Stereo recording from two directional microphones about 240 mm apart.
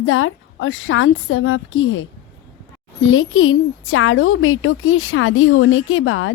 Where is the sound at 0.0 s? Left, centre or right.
Left.